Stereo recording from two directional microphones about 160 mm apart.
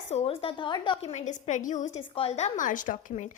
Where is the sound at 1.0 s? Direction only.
45° left (ahead or behind).